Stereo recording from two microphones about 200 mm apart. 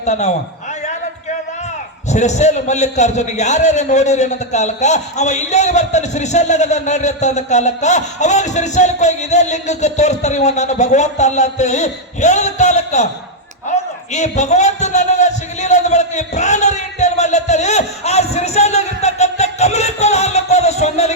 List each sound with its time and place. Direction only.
0.0 s a man's voice: 35° left (ahead or behind)
2.0 s a man's voice: 35° left (ahead or behind)
13.7 s a sound: 35° left (ahead or behind)